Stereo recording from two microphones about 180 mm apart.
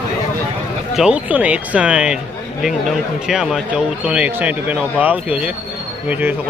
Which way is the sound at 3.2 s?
Centre (ahead or behind).